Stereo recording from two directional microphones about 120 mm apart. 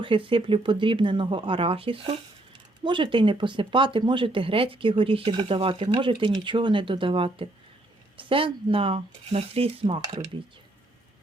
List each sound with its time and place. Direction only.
0.0 s speech: 45° right (ahead or behind)